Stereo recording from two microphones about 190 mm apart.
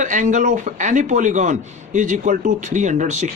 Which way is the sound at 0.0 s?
40° right (ahead or behind).